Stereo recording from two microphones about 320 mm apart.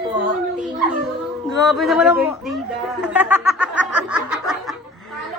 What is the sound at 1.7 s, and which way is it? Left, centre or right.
Speech, centre.